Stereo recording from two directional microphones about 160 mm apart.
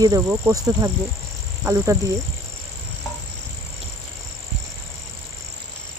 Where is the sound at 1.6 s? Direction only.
20° right (ahead or behind).